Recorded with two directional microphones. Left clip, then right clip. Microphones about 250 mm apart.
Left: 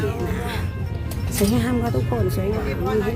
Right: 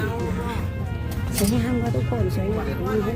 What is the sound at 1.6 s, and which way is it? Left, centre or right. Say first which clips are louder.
Speech: left 2 dB; centre.